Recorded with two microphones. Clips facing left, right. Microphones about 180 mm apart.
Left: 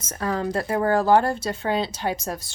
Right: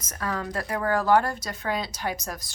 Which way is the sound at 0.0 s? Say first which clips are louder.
Left 5 dB; 30° left (ahead or behind).